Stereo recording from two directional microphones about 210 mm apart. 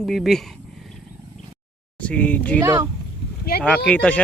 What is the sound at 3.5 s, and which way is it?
Speech, 45° left (ahead or behind).